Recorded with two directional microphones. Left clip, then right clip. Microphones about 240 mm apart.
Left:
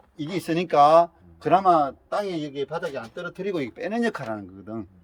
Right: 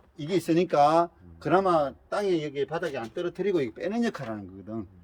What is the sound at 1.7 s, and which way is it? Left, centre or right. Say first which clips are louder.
Speech: left 5 dB; centre.